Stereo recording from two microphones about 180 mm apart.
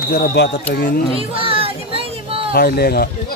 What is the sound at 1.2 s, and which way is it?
Music, 30° right (ahead or behind).